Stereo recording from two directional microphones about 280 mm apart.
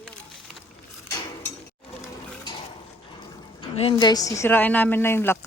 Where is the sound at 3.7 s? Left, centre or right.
Centre.